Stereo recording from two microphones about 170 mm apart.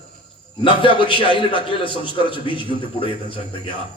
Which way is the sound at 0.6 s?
30° left (ahead or behind).